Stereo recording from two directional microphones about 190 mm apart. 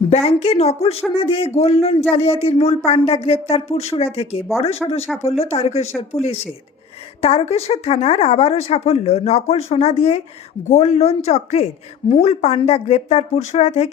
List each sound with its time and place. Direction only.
0.1 s a man's voice: 30° left (ahead or behind)
4.8 s speech: 5° left (ahead or behind)
5.2 s a man's voice: 35° left (ahead or behind)